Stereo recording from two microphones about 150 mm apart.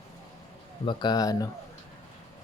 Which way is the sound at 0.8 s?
30° left (ahead or behind).